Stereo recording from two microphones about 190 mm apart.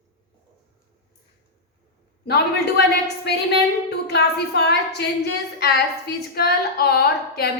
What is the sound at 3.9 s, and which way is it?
A woman's voice, 60° left (ahead or behind).